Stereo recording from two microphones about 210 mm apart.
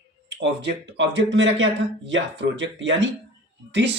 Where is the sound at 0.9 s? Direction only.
60° right (ahead or behind).